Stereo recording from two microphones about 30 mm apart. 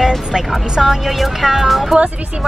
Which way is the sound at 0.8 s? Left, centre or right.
Centre.